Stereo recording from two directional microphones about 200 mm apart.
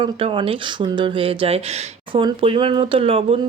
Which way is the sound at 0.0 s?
25° right (ahead or behind).